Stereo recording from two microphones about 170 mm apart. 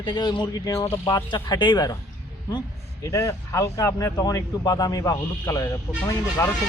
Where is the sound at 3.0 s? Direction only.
20° left (ahead or behind).